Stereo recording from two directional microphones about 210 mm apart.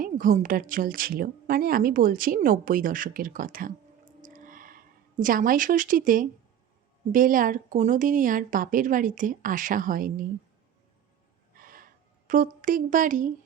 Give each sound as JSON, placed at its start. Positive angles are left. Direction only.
{"t": 0.0, "sound": "speech", "side_deg": -40}
{"t": 4.2, "sound": "a sound", "side_deg": -40}
{"t": 5.2, "sound": "speech", "side_deg": -40}
{"t": 11.5, "sound": "gasp", "side_deg": -40}
{"t": 12.3, "sound": "speech", "side_deg": -40}